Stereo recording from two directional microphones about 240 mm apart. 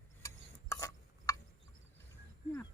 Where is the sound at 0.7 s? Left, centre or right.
Centre.